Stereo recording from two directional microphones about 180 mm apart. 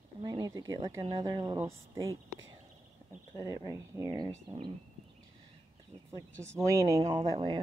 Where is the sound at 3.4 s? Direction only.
20° right (ahead or behind).